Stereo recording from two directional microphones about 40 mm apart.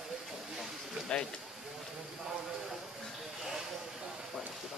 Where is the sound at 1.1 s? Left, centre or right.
Left.